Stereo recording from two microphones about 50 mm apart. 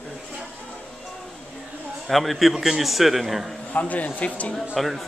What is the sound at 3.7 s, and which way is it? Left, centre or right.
Speech, left.